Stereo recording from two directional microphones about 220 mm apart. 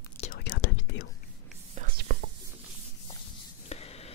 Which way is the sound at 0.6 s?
60° left (ahead or behind).